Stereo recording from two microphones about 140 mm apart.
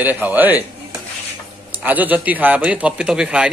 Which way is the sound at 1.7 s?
10° right (ahead or behind).